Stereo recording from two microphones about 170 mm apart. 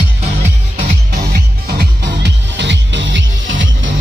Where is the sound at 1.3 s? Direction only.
80° right.